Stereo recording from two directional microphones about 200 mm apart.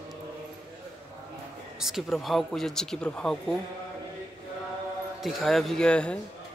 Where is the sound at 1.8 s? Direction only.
Centre (ahead or behind).